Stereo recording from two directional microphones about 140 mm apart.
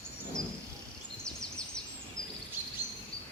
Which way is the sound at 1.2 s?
5° left (ahead or behind).